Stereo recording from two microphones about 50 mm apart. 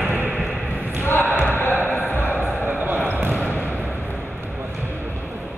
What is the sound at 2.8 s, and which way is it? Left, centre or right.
Basketball bounce, right.